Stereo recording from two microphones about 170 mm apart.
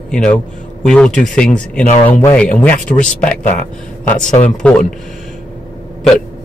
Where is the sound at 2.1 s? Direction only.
15° left (ahead or behind).